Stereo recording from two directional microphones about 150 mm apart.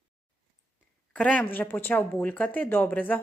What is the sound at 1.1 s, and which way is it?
A woman's voice, 10° left (ahead or behind).